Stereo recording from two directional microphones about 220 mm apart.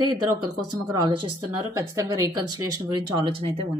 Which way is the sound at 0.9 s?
20° right (ahead or behind).